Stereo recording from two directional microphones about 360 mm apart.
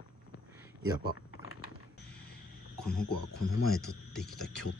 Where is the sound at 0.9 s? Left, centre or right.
Left.